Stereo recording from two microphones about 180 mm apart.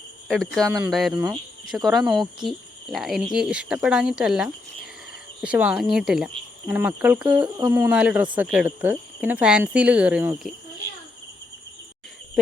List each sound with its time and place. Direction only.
0.3 s speech: centre (ahead or behind)
7.4 s speech: 25° right (ahead or behind)
7.7 s speech: 10° right (ahead or behind)